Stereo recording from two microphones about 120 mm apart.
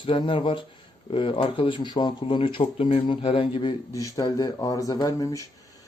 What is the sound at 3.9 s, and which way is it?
Speech, 30° left (ahead or behind).